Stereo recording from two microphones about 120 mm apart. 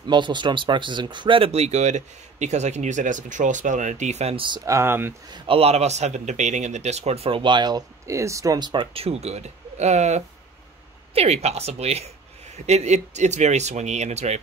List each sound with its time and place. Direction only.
0.0 s speech: 40° right (ahead or behind); by 4.5 s 60° right (ahead or behind)
4.6 s speech: 20° right (ahead or behind)
5.3 s a man's voice: 50° right (ahead or behind); by 8.8 s 35° right (ahead or behind)
8.9 s a man's voice: 55° right (ahead or behind)